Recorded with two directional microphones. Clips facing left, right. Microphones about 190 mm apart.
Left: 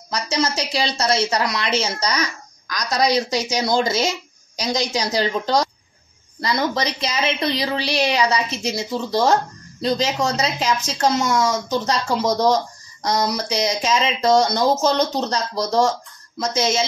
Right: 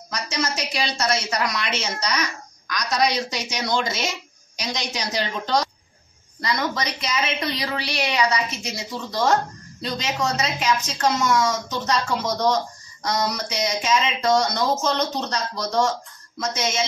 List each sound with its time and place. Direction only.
0.1 s speech: 30° left (ahead or behind)